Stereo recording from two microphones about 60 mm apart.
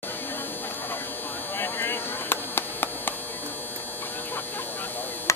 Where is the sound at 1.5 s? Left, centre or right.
Left.